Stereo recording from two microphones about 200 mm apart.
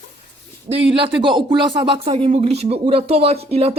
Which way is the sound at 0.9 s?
25° right (ahead or behind).